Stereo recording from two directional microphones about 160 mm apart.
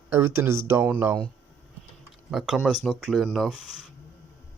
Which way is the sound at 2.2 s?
5° right (ahead or behind).